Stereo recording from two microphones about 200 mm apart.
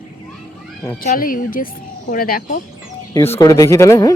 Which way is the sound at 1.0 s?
45° left (ahead or behind).